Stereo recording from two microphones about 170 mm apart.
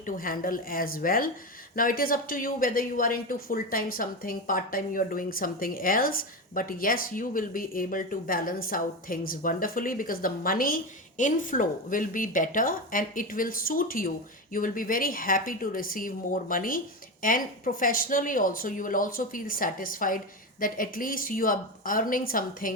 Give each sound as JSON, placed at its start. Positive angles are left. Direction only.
{"t": 0.0, "sound": "speech", "side_deg": 55}